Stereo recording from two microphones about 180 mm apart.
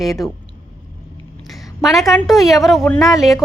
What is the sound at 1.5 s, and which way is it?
A woman's voice, centre (ahead or behind).